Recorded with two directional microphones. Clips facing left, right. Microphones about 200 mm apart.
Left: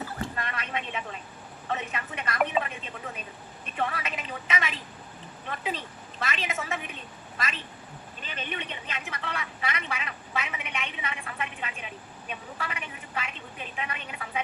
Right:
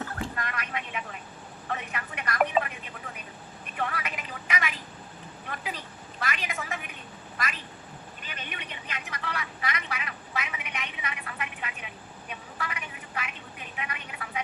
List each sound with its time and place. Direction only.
0.3 s vehicle: 25° left (ahead or behind)
1.7 s a woman's voice: 25° left (ahead or behind)
12.5 s a sound: 25° left (ahead or behind)
13.7 s speech: 25° left (ahead or behind)